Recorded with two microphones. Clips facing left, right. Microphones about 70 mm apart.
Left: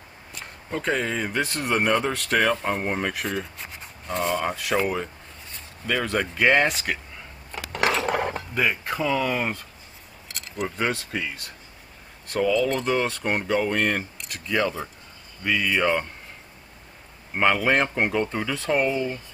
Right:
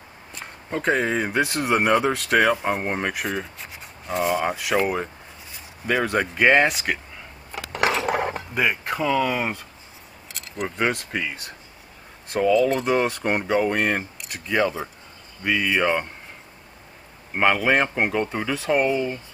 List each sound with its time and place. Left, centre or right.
0.7 s speech: centre
4.8 s speech: centre
7.5 s a sound: centre
8.5 s speech: centre
10.2 s keys jangling: centre
12.3 s speech: centre
17.4 s speech: centre